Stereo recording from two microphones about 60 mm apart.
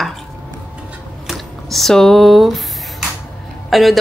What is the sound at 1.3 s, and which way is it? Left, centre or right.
Squish, centre.